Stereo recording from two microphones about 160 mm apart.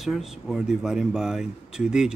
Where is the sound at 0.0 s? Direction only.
Centre (ahead or behind).